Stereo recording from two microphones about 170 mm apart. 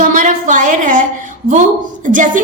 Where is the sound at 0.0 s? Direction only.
50° right (ahead or behind).